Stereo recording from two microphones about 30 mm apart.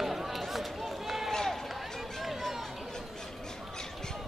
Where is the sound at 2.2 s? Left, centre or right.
Centre.